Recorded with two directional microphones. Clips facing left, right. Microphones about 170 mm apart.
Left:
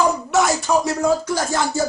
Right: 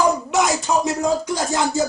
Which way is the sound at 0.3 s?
20° right (ahead or behind).